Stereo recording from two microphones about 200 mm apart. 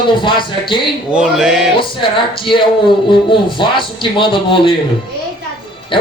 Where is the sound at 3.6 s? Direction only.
25° left (ahead or behind).